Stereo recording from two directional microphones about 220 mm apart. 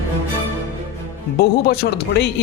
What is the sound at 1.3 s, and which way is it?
Speech, 45° left (ahead or behind).